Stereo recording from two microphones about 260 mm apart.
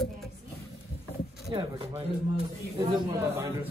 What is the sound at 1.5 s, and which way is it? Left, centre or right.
A man's voice, right.